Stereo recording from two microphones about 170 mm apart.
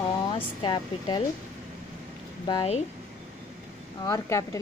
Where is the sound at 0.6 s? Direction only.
25° left (ahead or behind).